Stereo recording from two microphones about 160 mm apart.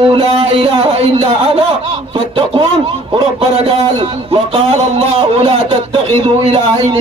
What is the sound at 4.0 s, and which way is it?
A man's voice, 35° right (ahead or behind).